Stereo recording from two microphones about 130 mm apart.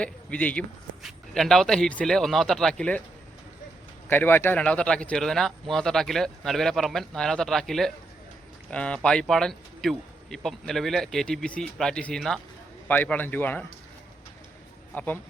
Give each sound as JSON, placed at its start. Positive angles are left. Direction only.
{"t": 0.0, "sound": "a man's voice", "side_deg": 10}
{"t": 4.1, "sound": "a man's voice", "side_deg": 15}
{"t": 14.9, "sound": "a man's voice", "side_deg": 15}